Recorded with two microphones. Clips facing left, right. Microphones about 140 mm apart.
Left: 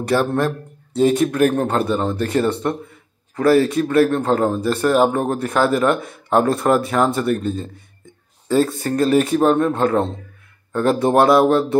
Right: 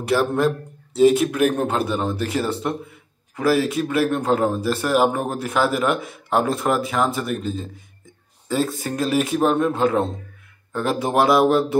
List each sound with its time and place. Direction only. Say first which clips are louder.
0.1 s speech: even; 5° right (ahead or behind)